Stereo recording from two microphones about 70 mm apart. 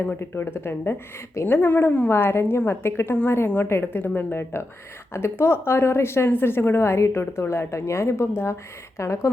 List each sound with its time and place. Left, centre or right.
0.0 s a woman's voice: left